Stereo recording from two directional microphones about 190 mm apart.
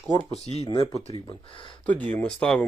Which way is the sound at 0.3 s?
35° left (ahead or behind).